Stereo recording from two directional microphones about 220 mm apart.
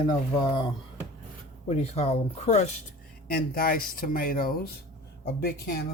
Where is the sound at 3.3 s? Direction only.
40° left (ahead or behind).